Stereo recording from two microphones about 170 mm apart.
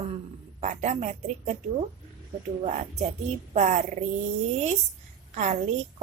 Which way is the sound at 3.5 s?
45° right (ahead or behind).